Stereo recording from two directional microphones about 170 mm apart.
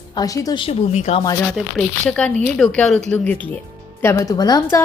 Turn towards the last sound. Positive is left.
turn(degrees=20)  # may be behind; listen again after turning